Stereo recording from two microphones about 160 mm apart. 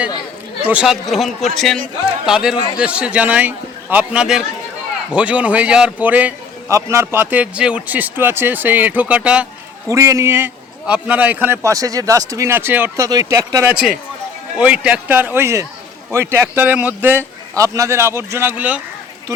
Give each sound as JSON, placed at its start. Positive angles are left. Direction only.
{"t": 0.7, "sound": "a man's voice", "side_deg": -5}
{"t": 9.9, "sound": "a man's voice", "side_deg": -20}
{"t": 13.7, "sound": "a man's voice", "side_deg": -5}